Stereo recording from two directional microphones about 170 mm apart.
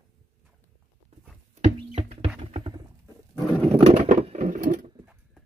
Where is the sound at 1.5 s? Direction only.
40° right (ahead or behind).